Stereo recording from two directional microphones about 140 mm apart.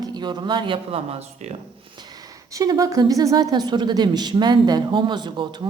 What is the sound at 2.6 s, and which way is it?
Speech, 25° right (ahead or behind).